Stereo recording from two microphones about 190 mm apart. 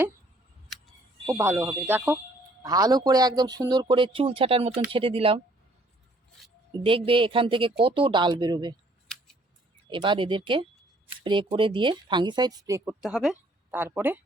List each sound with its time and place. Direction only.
1.3 s speech: 10° right (ahead or behind); by 5.4 s 30° right (ahead or behind)
6.8 s speech: 25° right (ahead or behind)
9.9 s speech: 25° right (ahead or behind); by 14.2 s 10° right (ahead or behind)